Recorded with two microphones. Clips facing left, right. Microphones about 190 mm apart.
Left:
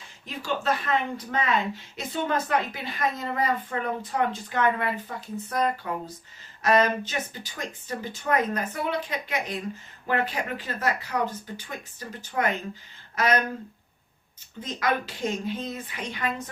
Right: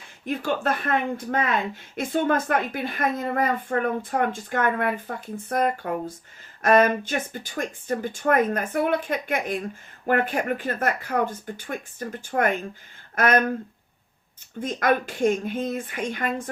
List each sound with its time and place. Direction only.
0.3 s a woman's voice: 55° right (ahead or behind)
14.6 s a woman's voice: 50° right (ahead or behind)